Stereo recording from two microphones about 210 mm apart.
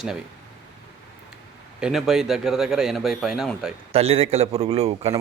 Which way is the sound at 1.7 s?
5° right (ahead or behind).